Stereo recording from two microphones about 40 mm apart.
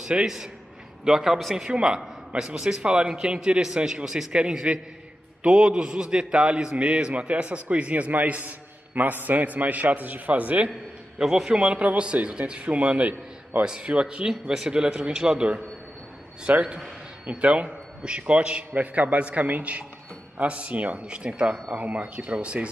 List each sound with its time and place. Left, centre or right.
0.1 s a man's voice: right
1.0 s a man's voice: centre; by 10.7 s right
11.1 s a man's voice: centre
11.5 s a man's voice: right
16.5 s a man's voice: right
17.3 s a man's voice: right
21.7 s a man's voice: right
22.0 s a man's voice: right